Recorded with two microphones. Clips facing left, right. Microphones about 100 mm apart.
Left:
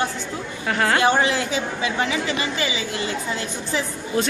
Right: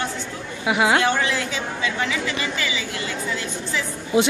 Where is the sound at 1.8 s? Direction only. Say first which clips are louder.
Even; 20° left (ahead or behind).